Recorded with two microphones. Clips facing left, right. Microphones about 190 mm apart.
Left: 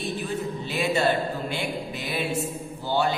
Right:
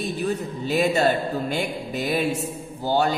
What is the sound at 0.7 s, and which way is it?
A man's voice, 45° right (ahead or behind).